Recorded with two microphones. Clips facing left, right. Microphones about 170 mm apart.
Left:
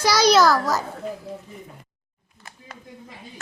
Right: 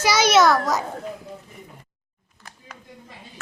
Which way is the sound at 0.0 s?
5° right (ahead or behind).